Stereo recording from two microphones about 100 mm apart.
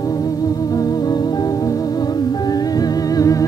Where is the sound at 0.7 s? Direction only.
40° left (ahead or behind).